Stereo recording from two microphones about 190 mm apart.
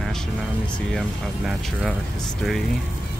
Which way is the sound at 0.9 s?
5° left (ahead or behind).